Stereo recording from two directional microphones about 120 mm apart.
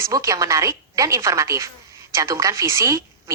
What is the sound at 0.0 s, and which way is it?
A woman's voice, 25° right (ahead or behind).